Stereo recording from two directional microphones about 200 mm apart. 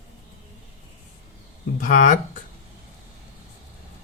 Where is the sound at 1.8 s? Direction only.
40° left (ahead or behind).